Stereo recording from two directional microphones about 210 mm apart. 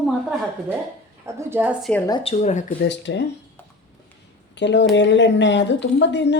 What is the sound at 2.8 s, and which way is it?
Speech, 55° left (ahead or behind).